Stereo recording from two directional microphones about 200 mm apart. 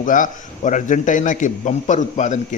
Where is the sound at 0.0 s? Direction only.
40° left (ahead or behind).